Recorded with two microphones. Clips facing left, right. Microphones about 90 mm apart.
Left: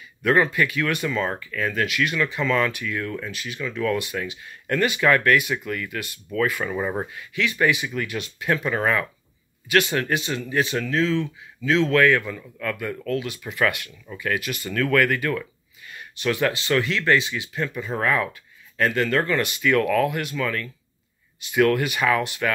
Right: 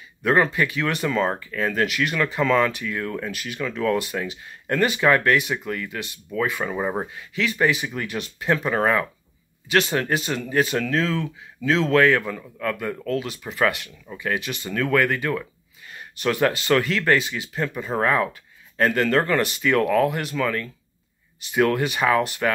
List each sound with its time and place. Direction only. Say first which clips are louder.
0.2 s speech: even; 30° right (ahead or behind); by 7.1 s 15° right (ahead or behind)
7.3 s speech: even; 35° right (ahead or behind)
15.9 s speech: right 1 dB; 40° right (ahead or behind)